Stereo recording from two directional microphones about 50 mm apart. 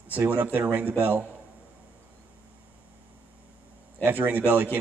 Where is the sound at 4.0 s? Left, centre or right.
Right.